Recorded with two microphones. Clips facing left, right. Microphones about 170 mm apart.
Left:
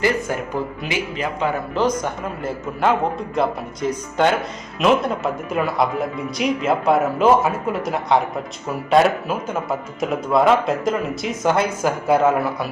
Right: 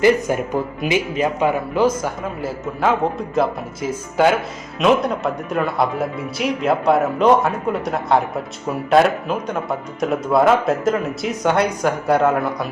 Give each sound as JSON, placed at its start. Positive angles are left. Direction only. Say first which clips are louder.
{"t": 0.0, "sound": "a man's voice", "louder": "right 5 dB", "side_deg": -20}